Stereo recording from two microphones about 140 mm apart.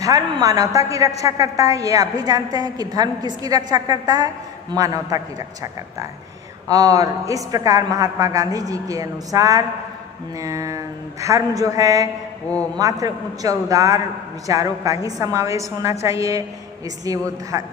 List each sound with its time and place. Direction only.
0.0 s a woman's voice: 25° right (ahead or behind)